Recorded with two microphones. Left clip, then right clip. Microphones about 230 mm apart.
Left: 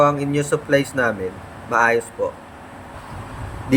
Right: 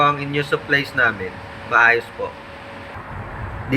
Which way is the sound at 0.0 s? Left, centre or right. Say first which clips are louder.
Left 1 dB; centre.